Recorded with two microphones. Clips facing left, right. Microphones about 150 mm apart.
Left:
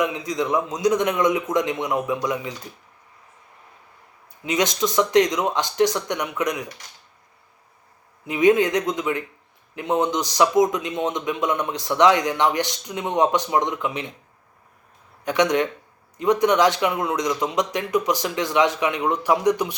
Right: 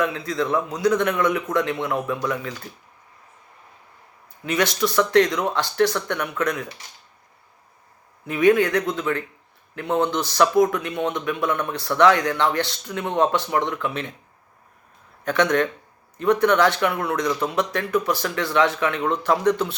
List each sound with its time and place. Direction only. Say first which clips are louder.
0.0 s a man's voice: even; 15° left (ahead or behind)
4.4 s a man's voice: even; 20° left (ahead or behind)
8.3 s a man's voice: even; 20° left (ahead or behind)
15.2 s a man's voice: even; 15° left (ahead or behind)